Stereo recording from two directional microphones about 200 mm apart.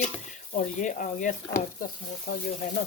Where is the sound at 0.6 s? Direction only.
40° left (ahead or behind).